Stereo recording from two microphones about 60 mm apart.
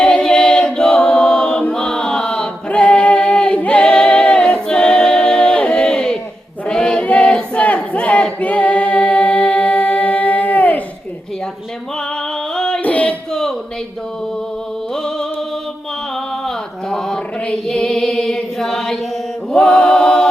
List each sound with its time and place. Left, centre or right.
0.0 s choir: centre
1.7 s music: centre
2.6 s singing: centre
6.7 s choir: centre
7.7 s a capella: left
12.5 s music: centre
12.8 s music: left
13.3 s a sound: centre
14.9 s music: centre
16.9 s mantra: centre
17.4 s chant: centre
19.5 s music: centre